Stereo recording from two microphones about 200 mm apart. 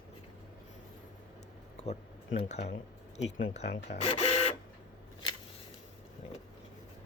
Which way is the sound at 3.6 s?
55° left (ahead or behind).